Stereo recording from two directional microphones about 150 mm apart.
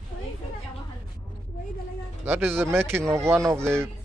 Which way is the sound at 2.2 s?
15° right (ahead or behind).